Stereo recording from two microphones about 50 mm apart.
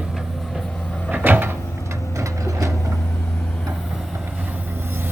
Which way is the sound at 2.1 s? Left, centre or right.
Right.